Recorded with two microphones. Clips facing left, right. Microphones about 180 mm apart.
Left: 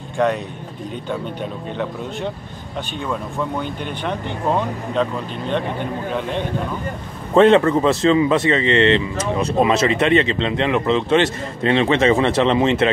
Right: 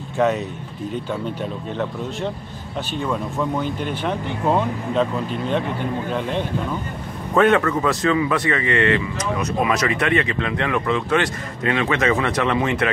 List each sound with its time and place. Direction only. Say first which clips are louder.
0.2 s speech: even; 5° right (ahead or behind)
3.0 s speech: right 1 dB; centre (ahead or behind)
7.3 s speech: left 4 dB; 25° left (ahead or behind)